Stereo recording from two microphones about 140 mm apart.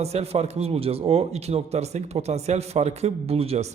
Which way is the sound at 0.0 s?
50° right (ahead or behind).